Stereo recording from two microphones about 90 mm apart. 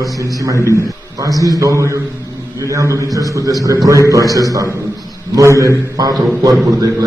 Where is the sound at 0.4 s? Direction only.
40° right (ahead or behind).